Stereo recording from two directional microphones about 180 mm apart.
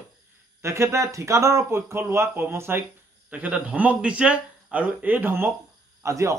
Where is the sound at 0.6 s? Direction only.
15° right (ahead or behind).